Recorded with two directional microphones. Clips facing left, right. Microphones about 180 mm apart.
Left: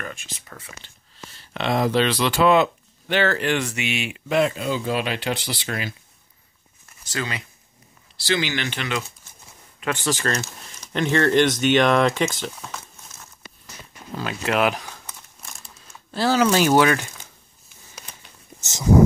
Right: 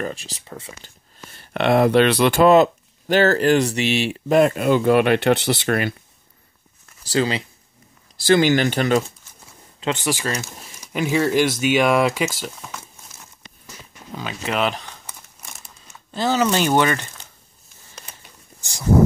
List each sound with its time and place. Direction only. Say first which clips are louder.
0.0 s speech: right 7 dB; 35° right (ahead or behind)
0.8 s speech: even; 55° right (ahead or behind)
7.0 s speech: right 9 dB; 30° right (ahead or behind)
8.2 s speech: right 9 dB; 50° right (ahead or behind)
9.8 s speech: right 2 dB; 20° right (ahead or behind); by 12.8 s 5° right (ahead or behind)
14.1 s speech: left 2 dB; centre (ahead or behind)
15.0 s crumpling: right 1 dB; 5° right (ahead or behind)
18.6 s speech: left 3 dB; 20° left (ahead or behind)